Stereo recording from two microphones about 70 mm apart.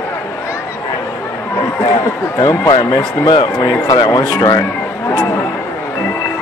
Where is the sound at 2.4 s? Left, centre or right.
Left.